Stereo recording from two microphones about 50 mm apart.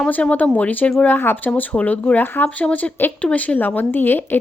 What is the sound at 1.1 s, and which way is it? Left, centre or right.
Speech, left.